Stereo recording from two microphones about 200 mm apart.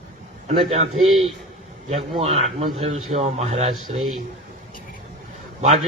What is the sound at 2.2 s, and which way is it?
Speech, 30° right (ahead or behind).